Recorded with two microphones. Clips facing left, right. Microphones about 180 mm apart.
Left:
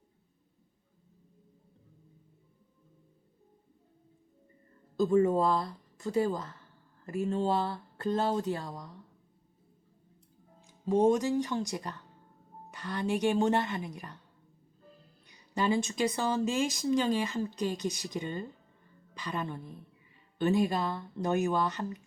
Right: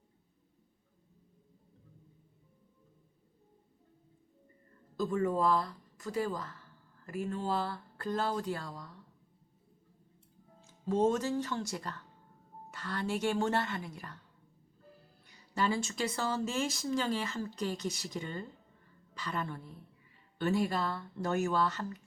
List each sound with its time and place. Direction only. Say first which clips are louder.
4.9 s speech: left 6 dB; 25° left (ahead or behind)
10.6 s speech: left 3 dB; 15° left (ahead or behind)
15.3 s speech: left 3 dB; 15° left (ahead or behind)